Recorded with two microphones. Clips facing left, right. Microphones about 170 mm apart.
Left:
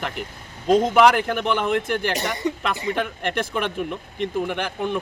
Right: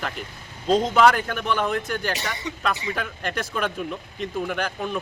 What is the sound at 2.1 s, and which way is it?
Speech, 55° left (ahead or behind).